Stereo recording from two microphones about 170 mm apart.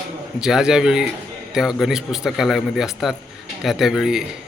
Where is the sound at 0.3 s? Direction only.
5° right (ahead or behind).